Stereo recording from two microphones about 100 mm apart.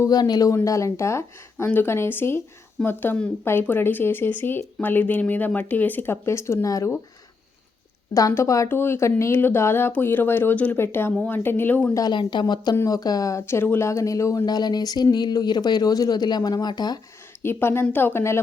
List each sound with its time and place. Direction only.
0.0 s speech: 40° left (ahead or behind)
8.3 s speech: 30° left (ahead or behind)
11.9 s speech: 45° left (ahead or behind)
12.9 s speech: 40° left (ahead or behind)
14.4 s speech: 45° left (ahead or behind)
17.4 s speech: 25° left (ahead or behind)